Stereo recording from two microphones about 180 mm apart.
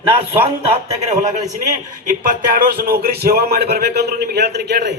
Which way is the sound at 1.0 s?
40° right (ahead or behind).